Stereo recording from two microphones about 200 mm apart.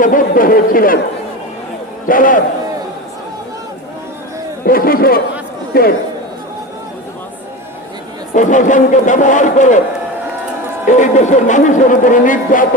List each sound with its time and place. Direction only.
0.0 s speech: 45° left (ahead or behind)
2.0 s speech: 45° left (ahead or behind)
4.6 s speech: 45° left (ahead or behind)
8.3 s speech: 40° left (ahead or behind)
10.8 s speech: 35° left (ahead or behind)